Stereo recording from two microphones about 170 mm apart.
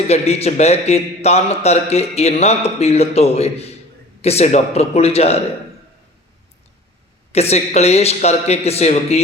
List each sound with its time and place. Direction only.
0.1 s a man's voice: 40° left (ahead or behind)
7.3 s a man's voice: 40° left (ahead or behind)